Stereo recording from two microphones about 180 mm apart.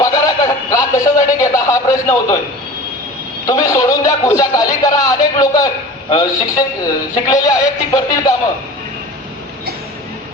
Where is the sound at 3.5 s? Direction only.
20° left (ahead or behind).